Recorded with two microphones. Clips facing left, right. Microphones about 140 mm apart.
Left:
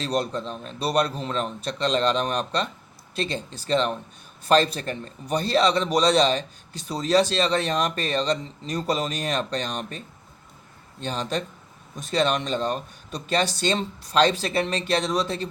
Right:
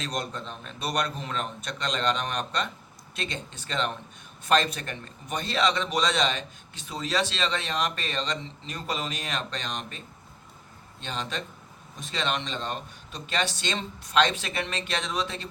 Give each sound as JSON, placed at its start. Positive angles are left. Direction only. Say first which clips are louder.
{"t": 0.0, "sound": "a man's voice", "louder": "left 7 dB", "side_deg": 35}
{"t": 11.0, "sound": "a man's voice", "louder": "left 6 dB", "side_deg": 40}